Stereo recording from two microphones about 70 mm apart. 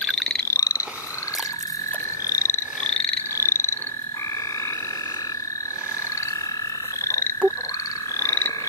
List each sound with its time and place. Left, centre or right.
0.1 s frog: centre
0.5 s frog: left
2.2 s croak: left
3.3 s frog: left
7.1 s frog: left